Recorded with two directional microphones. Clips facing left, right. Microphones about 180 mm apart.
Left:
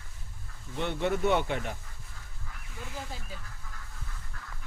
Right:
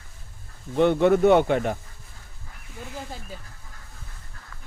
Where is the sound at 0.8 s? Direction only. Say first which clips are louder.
Right 11 dB; 60° right (ahead or behind).